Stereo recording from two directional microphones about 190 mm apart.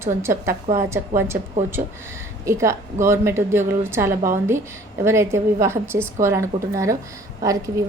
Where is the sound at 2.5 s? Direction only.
15° right (ahead or behind).